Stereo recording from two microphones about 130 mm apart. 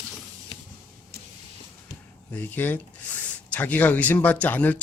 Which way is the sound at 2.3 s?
15° left (ahead or behind).